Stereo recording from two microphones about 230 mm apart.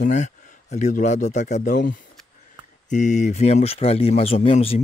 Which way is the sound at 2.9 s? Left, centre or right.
Left.